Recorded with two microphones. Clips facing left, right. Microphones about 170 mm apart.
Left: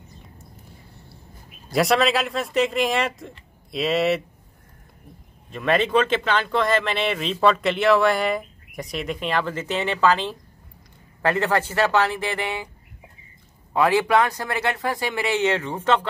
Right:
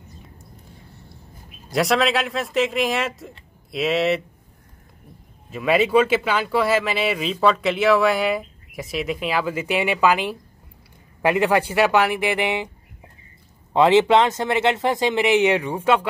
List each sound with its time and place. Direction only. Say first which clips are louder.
1.7 s speech: even; centre (ahead or behind)
5.5 s speech: right 2 dB; 5° right (ahead or behind)
13.7 s speech: right 4 dB; 20° right (ahead or behind)